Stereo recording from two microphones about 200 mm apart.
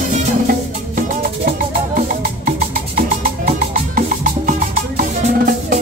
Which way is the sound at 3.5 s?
40° right (ahead or behind).